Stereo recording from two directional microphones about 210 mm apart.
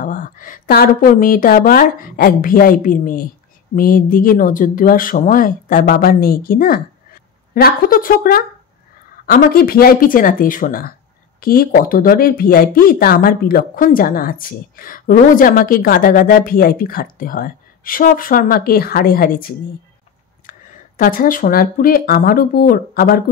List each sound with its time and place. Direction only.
0.0 s a woman's voice: 40° left (ahead or behind)